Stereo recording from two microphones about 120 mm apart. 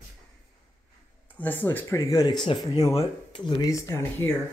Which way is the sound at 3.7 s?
25° left (ahead or behind).